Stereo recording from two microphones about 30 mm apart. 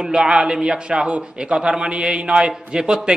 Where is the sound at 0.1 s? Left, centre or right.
Right.